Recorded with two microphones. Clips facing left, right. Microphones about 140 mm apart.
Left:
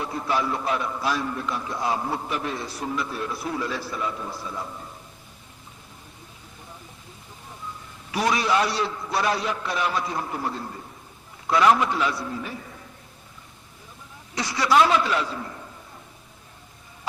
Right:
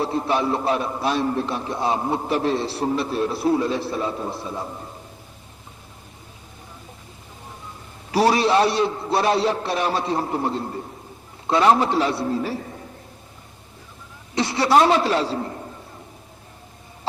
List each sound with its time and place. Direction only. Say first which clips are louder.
0.0 s a man's voice: right 4 dB; 25° right (ahead or behind)
8.1 s a man's voice: right 5 dB; 35° right (ahead or behind)
14.3 s a man's voice: right 3 dB; 25° right (ahead or behind)